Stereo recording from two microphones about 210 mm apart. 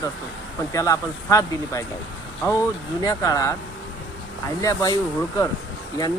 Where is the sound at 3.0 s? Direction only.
15° left (ahead or behind).